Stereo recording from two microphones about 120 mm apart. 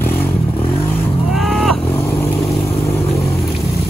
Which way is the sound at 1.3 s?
Centre (ahead or behind).